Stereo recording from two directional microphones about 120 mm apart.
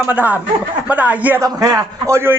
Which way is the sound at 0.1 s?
15° right (ahead or behind).